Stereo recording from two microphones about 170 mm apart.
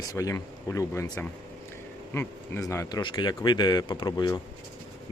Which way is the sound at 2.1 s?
15° left (ahead or behind).